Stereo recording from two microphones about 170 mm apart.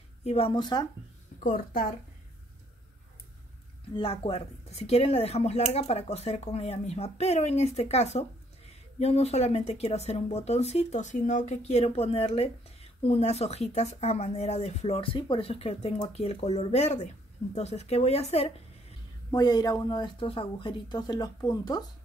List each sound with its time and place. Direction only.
0.2 s speech: 35° left (ahead or behind)
1.4 s a woman's voice: 55° left (ahead or behind)
3.9 s speech: 35° left (ahead or behind)
19.3 s speech: 25° left (ahead or behind)